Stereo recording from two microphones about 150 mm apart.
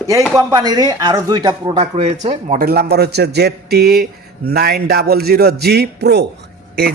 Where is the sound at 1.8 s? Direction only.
40° right (ahead or behind).